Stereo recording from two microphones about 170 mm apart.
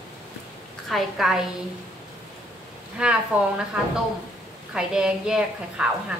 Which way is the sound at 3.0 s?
5° right (ahead or behind).